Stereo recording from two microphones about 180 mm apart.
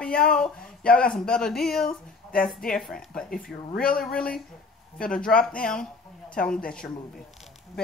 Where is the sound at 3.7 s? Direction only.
55° left (ahead or behind).